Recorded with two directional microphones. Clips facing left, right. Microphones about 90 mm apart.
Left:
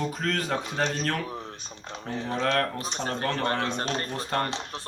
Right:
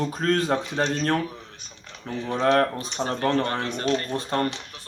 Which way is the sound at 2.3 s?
25° right (ahead or behind).